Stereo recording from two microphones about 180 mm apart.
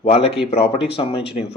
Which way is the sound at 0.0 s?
35° left (ahead or behind).